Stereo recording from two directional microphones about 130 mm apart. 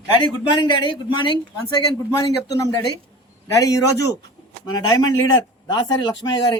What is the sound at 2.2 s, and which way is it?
A man's voice, 25° left (ahead or behind).